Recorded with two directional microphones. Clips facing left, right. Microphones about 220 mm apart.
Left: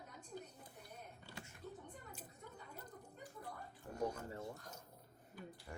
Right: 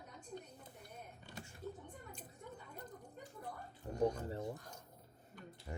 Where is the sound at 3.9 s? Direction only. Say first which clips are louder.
Right 5 dB; 20° right (ahead or behind).